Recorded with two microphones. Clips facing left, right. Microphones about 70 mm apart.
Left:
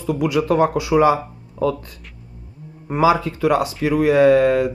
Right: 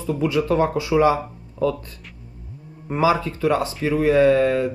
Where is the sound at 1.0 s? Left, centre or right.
Left.